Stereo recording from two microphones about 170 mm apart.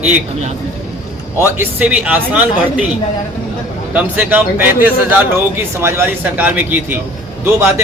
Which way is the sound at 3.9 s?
10° right (ahead or behind).